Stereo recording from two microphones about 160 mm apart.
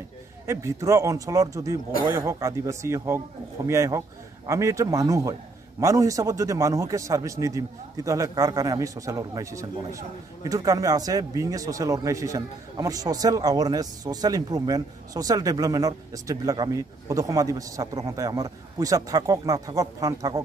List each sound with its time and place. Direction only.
0.5 s a man's voice: 20° right (ahead or behind)